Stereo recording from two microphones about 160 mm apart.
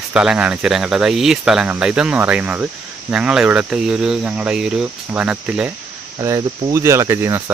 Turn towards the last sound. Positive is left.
turn(degrees=-15)  # may be behind; listen again after turning